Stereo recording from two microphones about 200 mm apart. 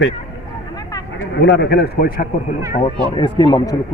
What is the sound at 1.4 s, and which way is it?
Speech, 55° left (ahead or behind).